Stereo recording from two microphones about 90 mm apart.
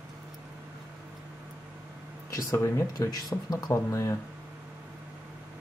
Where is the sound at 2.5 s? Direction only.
25° left (ahead or behind).